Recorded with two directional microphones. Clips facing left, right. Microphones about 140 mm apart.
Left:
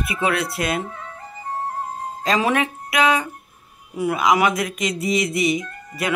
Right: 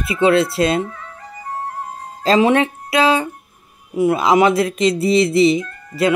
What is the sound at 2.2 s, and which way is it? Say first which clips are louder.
Speech: right 6 dB; 25° right (ahead or behind).